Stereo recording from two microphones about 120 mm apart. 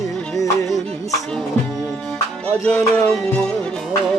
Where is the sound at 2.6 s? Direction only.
10° left (ahead or behind).